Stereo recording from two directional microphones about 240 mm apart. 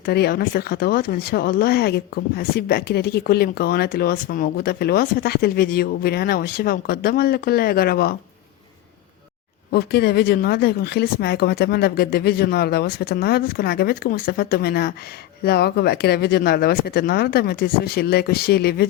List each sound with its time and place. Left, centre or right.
0.0 s speech: left
9.7 s speech: left